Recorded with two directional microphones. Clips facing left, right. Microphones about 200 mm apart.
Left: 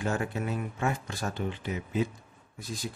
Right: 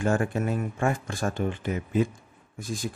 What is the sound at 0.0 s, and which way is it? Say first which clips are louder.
Speech: right 5 dB; 50° right (ahead or behind).